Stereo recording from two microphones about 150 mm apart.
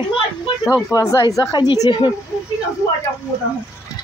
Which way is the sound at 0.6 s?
20° left (ahead or behind).